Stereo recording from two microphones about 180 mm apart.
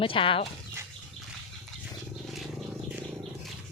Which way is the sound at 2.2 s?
Centre (ahead or behind).